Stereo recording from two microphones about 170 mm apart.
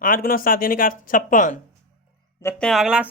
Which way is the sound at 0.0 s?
55° left (ahead or behind).